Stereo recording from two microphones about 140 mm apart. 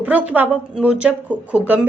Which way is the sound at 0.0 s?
10° right (ahead or behind).